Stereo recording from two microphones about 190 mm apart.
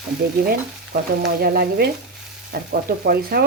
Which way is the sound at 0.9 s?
55° right (ahead or behind).